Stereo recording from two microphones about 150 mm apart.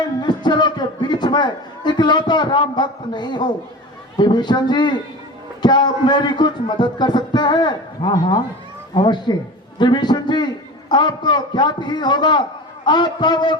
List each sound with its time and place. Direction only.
0.0 s a man's voice: 30° left (ahead or behind)